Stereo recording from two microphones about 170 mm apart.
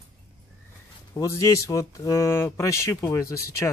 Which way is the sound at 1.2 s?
20° left (ahead or behind).